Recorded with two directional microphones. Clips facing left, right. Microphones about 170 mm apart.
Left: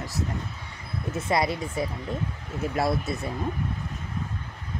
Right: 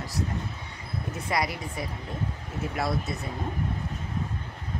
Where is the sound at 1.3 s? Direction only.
25° left (ahead or behind).